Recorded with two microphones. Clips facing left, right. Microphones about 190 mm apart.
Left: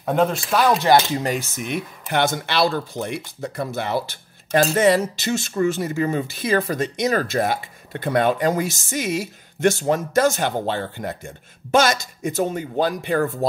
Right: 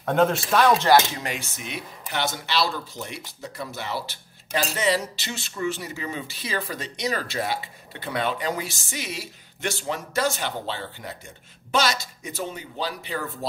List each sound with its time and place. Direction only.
0.0 s speech: centre (ahead or behind)
0.8 s speech: 20° left (ahead or behind)
1.2 s speech: 40° left (ahead or behind)